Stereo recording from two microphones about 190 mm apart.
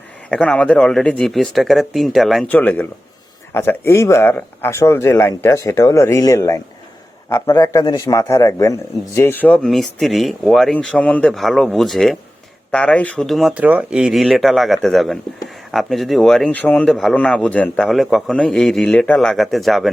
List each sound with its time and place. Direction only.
0.3 s a man's voice: 5° left (ahead or behind)